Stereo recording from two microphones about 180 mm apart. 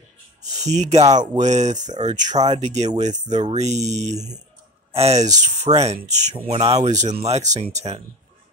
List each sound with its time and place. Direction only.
0.4 s speech: 40° right (ahead or behind)